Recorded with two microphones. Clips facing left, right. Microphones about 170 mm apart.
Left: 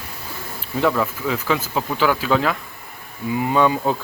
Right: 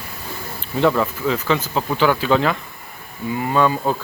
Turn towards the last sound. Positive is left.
turn(degrees=15)  # may be behind; listen again after turning